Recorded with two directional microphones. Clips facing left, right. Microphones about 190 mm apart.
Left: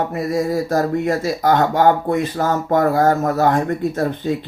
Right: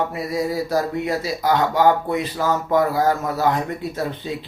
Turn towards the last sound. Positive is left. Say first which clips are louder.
# left 6 dB
turn(degrees=50)  # may be behind; listen again after turning